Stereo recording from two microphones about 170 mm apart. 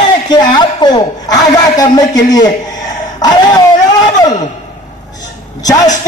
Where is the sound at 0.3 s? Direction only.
25° left (ahead or behind).